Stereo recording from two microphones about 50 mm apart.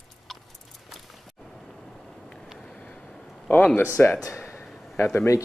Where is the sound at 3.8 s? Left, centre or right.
Left.